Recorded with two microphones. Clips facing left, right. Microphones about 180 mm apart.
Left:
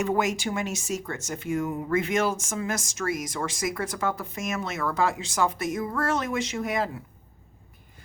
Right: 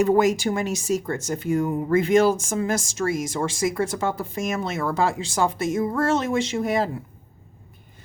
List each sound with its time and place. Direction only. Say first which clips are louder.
0.0 s speech: right 7 dB; 35° right (ahead or behind)